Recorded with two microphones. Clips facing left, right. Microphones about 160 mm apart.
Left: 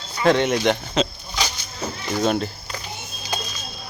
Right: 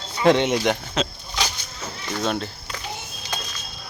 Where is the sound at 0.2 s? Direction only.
20° right (ahead or behind).